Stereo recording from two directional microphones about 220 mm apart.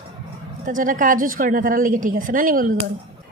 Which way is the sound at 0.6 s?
40° right (ahead or behind).